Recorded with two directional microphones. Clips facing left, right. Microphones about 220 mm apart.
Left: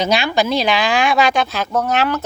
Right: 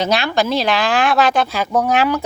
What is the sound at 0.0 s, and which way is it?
Speech, centre (ahead or behind).